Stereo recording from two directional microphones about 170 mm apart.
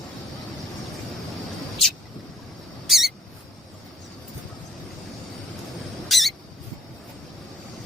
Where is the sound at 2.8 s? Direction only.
Centre (ahead or behind).